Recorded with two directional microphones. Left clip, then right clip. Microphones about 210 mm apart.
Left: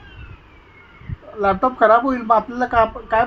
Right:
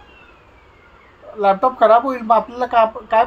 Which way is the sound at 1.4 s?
15° left (ahead or behind).